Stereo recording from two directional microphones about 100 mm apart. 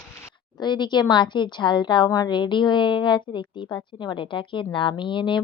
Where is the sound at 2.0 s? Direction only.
40° left (ahead or behind); by 5.4 s 55° left (ahead or behind).